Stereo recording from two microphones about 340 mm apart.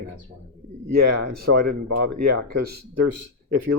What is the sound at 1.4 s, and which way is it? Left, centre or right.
Speech, right.